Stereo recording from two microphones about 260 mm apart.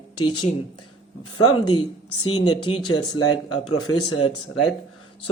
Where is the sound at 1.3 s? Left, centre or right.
Left.